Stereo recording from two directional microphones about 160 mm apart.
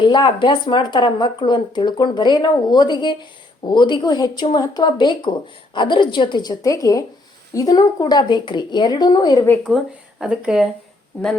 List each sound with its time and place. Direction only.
0.0 s speech: 30° left (ahead or behind)
9.6 s speech: centre (ahead or behind)